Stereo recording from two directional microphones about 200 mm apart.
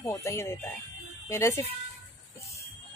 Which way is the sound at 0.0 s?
15° left (ahead or behind).